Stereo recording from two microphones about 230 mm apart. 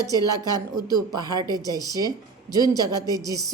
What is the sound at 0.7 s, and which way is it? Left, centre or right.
A woman's voice, centre.